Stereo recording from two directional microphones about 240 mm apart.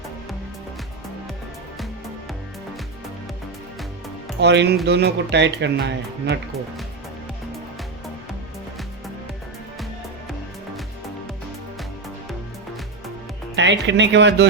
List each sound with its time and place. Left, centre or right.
4.4 s speech: right
13.6 s speech: right